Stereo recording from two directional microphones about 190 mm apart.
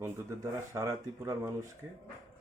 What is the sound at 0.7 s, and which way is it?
Speech, 15° right (ahead or behind).